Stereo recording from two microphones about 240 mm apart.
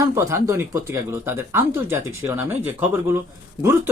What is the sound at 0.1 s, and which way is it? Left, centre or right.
Speech, centre.